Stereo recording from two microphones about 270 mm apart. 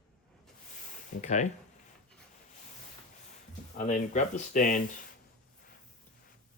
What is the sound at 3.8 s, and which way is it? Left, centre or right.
Speech, left.